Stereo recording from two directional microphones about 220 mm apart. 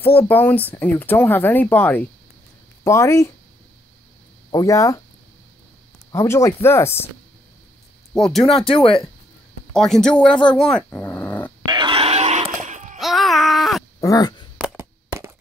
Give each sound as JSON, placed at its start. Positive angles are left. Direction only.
{"t": 0.3, "sound": "speech", "side_deg": 10}
{"t": 4.5, "sound": "speech", "side_deg": 15}
{"t": 6.1, "sound": "speech", "side_deg": 10}
{"t": 8.1, "sound": "speech", "side_deg": 0}
{"t": 8.6, "sound": "speech", "side_deg": 25}
{"t": 9.7, "sound": "speech", "side_deg": 5}
{"t": 11.6, "sound": "a sound", "side_deg": -20}
{"t": 13.0, "sound": "a sound", "side_deg": 0}
{"t": 14.0, "sound": "speech", "side_deg": 15}
{"t": 14.6, "sound": "a sound", "side_deg": -10}